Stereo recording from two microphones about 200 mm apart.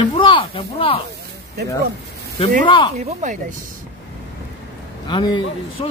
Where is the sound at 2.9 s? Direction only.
35° right (ahead or behind).